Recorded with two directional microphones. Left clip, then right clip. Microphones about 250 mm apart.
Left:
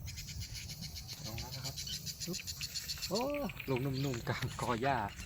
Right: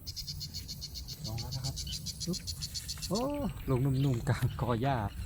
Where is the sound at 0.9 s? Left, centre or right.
Right.